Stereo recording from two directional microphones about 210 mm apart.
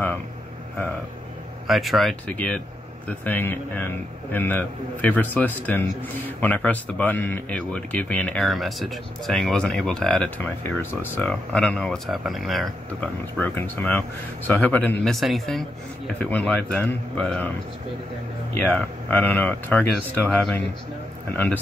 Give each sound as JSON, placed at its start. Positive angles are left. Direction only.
{"t": 1.7, "sound": "speech", "side_deg": 0}
{"t": 18.6, "sound": "speech", "side_deg": 5}